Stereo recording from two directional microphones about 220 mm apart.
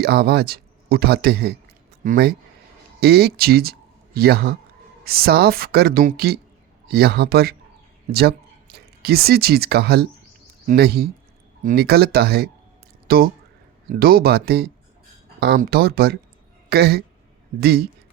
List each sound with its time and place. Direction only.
0.0 s speech: 45° right (ahead or behind)